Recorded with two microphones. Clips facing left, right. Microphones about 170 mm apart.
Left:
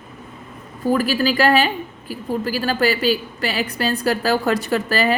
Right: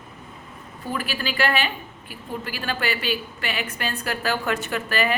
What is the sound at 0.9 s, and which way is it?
A woman's voice, 40° left (ahead or behind).